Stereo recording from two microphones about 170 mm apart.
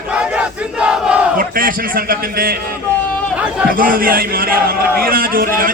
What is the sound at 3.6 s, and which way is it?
A man's voice, 55° right (ahead or behind).